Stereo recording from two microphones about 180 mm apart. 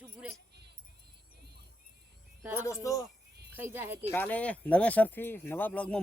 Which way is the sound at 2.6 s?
15° left (ahead or behind).